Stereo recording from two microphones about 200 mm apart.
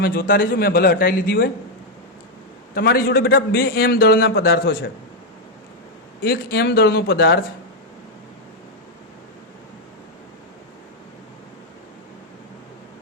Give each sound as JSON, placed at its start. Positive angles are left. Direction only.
{"t": 0.0, "sound": "a man's voice", "side_deg": 45}
{"t": 2.7, "sound": "a man's voice", "side_deg": 50}
{"t": 6.2, "sound": "a man's voice", "side_deg": 50}
{"t": 7.1, "sound": "speech", "side_deg": 70}